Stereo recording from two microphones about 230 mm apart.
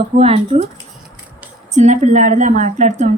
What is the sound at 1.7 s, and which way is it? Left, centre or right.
A woman's voice, right.